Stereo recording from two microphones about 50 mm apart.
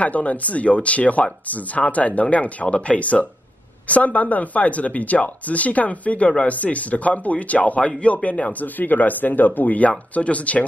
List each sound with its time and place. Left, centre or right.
0.0 s speech: left